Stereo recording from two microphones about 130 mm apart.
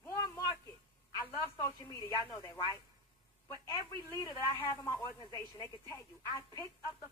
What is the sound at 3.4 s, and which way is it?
A woman's voice, 25° left (ahead or behind).